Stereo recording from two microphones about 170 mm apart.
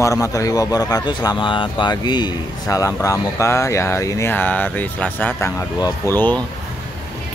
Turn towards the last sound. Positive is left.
turn(degrees=10)  # may be behind; listen again after turning